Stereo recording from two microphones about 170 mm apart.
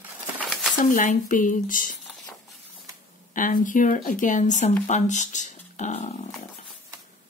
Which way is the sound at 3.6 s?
50° left (ahead or behind).